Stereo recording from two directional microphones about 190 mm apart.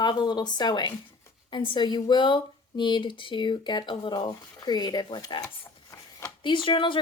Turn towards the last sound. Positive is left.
turn(degrees=25)  # may be behind; listen again after turning